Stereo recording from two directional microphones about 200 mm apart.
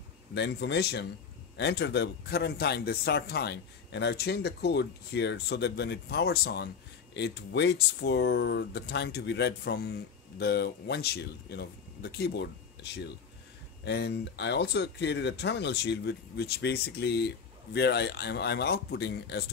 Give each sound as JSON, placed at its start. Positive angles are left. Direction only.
{"t": 0.3, "sound": "speech", "side_deg": 60}